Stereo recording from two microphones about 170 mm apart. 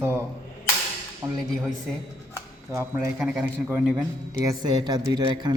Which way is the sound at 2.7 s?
15° right (ahead or behind).